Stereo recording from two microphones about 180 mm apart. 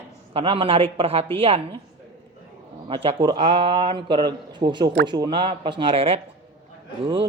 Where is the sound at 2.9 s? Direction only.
30° right (ahead or behind).